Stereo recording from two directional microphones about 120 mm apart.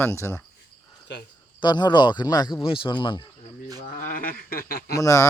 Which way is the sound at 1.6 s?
40° left (ahead or behind).